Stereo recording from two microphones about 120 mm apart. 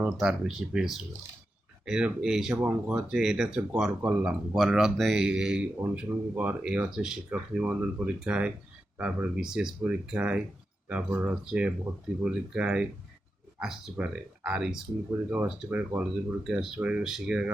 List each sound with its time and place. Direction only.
0.0 s speech: 5° right (ahead or behind)
13.9 s speech: 10° right (ahead or behind)
16.4 s speech: 5° right (ahead or behind)